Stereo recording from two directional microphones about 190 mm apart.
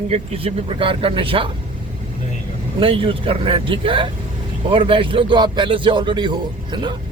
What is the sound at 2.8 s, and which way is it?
Speech, 30° right (ahead or behind).